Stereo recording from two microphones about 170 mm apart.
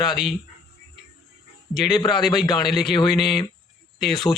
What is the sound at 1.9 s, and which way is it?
A man's voice, 25° left (ahead or behind).